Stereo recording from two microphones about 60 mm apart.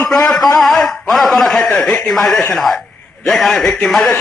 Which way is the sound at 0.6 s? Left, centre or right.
Centre.